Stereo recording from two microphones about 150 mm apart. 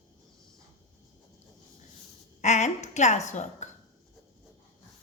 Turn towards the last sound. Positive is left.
turn(degrees=50)  # may be behind; listen again after turning